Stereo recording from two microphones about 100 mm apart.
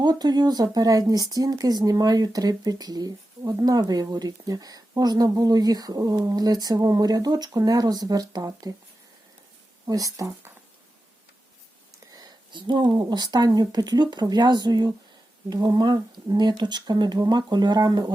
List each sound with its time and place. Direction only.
0.0 s speech: 45° right (ahead or behind)
9.8 s speech: 35° right (ahead or behind)
12.1 s a sound: 45° right (ahead or behind)
13.1 s speech: 45° right (ahead or behind)